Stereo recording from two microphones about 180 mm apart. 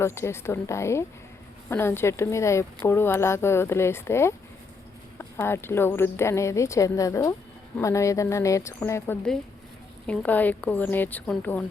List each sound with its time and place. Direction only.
0.0 s speech: 15° left (ahead or behind)